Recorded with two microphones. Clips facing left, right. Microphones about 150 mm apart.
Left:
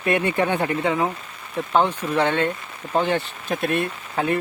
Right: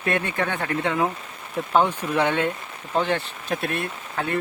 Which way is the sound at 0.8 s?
5° left (ahead or behind).